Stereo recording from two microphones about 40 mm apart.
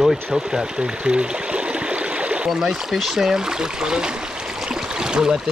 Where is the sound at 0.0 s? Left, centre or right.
Centre.